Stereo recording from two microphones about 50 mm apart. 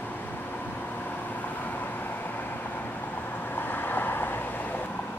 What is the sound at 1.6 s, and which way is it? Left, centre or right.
Vehicle, left.